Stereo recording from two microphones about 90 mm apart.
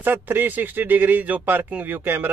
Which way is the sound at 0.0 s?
20° right (ahead or behind).